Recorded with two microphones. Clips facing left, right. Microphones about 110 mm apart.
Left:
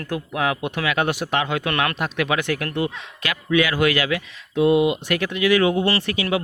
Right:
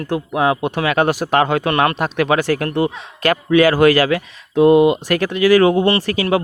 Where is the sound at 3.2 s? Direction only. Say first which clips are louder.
Right 8 dB; 45° right (ahead or behind).